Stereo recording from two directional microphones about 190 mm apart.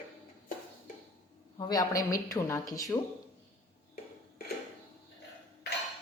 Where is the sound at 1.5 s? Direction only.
20° left (ahead or behind).